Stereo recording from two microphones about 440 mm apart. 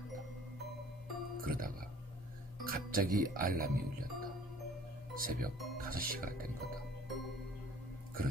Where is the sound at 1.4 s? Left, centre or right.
Centre.